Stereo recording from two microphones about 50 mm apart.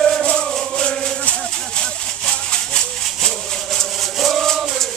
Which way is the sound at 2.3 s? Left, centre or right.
Centre.